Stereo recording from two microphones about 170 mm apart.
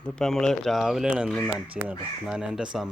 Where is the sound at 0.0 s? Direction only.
5° left (ahead or behind).